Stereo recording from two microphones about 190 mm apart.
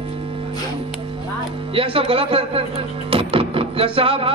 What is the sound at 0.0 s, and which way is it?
Music, 30° right (ahead or behind).